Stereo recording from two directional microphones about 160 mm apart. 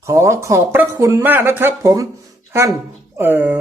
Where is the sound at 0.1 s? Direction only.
20° right (ahead or behind).